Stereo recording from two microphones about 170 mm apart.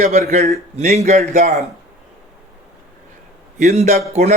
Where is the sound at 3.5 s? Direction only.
40° right (ahead or behind).